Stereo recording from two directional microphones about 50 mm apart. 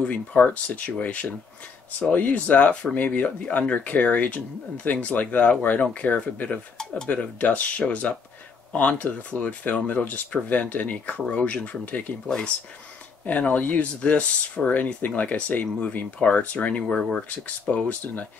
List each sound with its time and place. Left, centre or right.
0.0 s speech: left
6.8 s speech: centre
7.1 s speech: left
13.2 s speech: left